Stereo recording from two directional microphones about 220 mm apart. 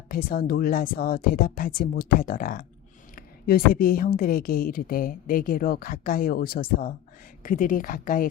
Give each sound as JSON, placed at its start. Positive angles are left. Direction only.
{"t": 0.1, "sound": "a woman's voice", "side_deg": 40}